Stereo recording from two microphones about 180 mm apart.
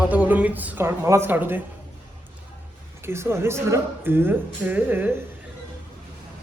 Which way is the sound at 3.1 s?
15° right (ahead or behind).